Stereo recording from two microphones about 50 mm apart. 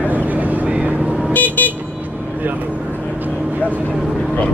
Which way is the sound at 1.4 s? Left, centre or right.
Left.